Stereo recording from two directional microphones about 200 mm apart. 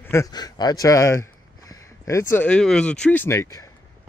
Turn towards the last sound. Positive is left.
turn(degrees=15)  # may be behind; listen again after turning